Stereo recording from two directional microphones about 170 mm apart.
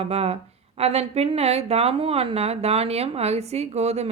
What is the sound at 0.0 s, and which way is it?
Speech, 35° right (ahead or behind).